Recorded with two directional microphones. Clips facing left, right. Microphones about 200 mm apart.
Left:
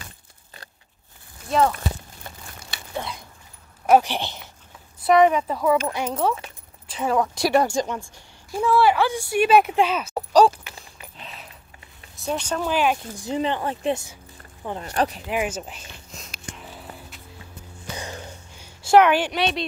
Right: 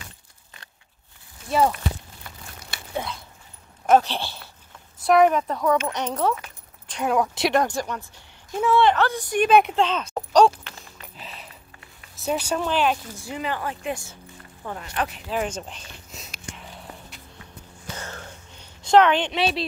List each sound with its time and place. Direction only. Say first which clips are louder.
1.5 s speech: left 1 dB; 5° right (ahead or behind)
3.8 s speech: left 1 dB; 10° left (ahead or behind)
5.0 s speech: left 1 dB; centre (ahead or behind)
7.8 s speech: left 2 dB; 20° left (ahead or behind)
8.5 s speech: even; centre (ahead or behind)
11.1 s a sound: even; centre (ahead or behind)
12.2 s speech: right 1 dB; 5° right (ahead or behind)
12.6 s speech: left 3 dB; 10° left (ahead or behind)
13.3 s speech: left 5 dB; 25° left (ahead or behind)
15.2 s a sound: left 1 dB; 10° left (ahead or behind)
17.9 s a sound: left 4 dB; 15° left (ahead or behind)